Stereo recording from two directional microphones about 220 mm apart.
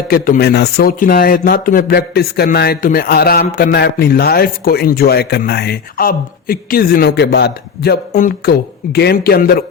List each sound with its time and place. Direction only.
0.1 s a man's voice: 45° left (ahead or behind)